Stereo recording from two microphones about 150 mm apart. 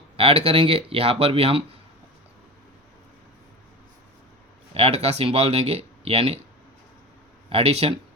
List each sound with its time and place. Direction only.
0.2 s speech: 40° right (ahead or behind)
4.7 s speech: 40° right (ahead or behind)
7.5 s speech: 40° right (ahead or behind)